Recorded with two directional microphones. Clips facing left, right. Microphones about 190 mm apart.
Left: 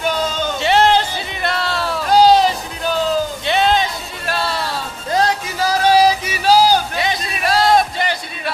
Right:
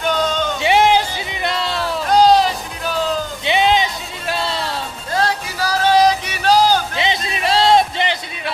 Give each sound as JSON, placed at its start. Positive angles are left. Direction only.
{"t": 0.0, "sound": "music", "side_deg": 5}
{"t": 0.6, "sound": "music", "side_deg": -15}
{"t": 2.0, "sound": "music", "side_deg": 0}
{"t": 3.4, "sound": "music", "side_deg": -15}
{"t": 5.1, "sound": "music", "side_deg": 20}
{"t": 5.9, "sound": "music", "side_deg": 5}
{"t": 7.0, "sound": "a sound", "side_deg": -25}